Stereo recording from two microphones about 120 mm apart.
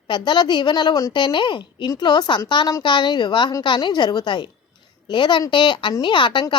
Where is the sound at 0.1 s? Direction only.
40° left (ahead or behind).